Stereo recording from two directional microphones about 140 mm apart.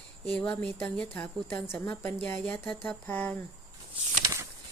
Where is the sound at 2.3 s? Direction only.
10° left (ahead or behind).